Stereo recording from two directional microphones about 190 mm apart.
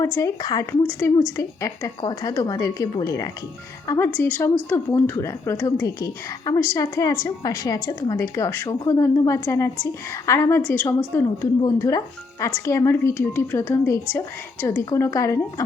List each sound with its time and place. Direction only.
0.0 s a woman's voice: 15° left (ahead or behind)